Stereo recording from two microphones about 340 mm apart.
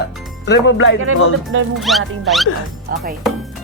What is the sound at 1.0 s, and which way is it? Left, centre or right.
Speech, right.